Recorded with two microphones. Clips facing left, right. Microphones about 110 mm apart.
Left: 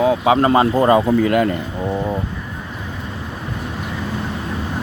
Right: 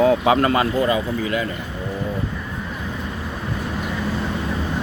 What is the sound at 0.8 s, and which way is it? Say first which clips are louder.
Speech: left 7 dB; 50° left (ahead or behind).